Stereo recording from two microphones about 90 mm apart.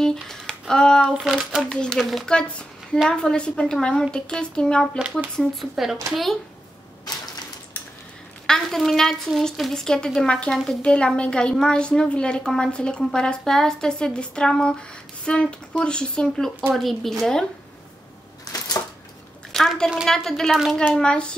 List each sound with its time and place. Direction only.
0.0 s speech: 5° left (ahead or behind)
1.0 s speech: 5° right (ahead or behind)
1.7 s a woman's voice: 10° left (ahead or behind)
8.5 s a woman's voice: 5° left (ahead or behind)
18.4 s a sound: 45° left (ahead or behind)
19.5 s a woman's voice: 5° left (ahead or behind)